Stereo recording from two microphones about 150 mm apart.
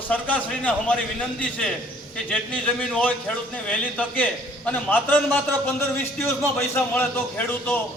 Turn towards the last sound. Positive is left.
turn(degrees=15)  # may be behind; listen again after turning